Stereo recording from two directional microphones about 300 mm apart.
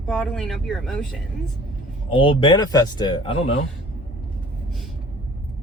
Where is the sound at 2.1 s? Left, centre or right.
Centre.